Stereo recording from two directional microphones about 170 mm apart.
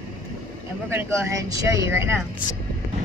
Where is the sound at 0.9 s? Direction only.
15° right (ahead or behind).